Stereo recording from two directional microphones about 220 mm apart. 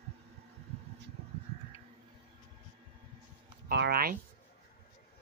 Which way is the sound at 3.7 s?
45° right (ahead or behind).